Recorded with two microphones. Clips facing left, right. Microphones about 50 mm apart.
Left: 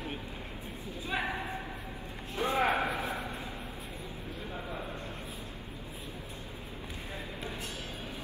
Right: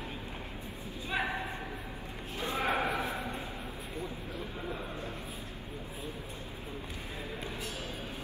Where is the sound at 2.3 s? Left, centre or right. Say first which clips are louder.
Left 3 dB; left.